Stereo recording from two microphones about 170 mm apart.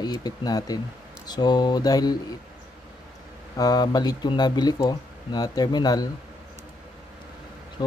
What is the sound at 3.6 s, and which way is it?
Speech, 25° left (ahead or behind).